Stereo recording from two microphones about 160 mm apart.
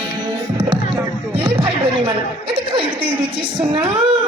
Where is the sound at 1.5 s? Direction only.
30° right (ahead or behind).